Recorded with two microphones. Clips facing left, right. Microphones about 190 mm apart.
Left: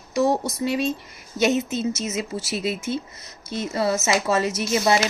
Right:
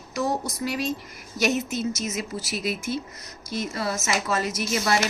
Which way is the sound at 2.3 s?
25° left (ahead or behind).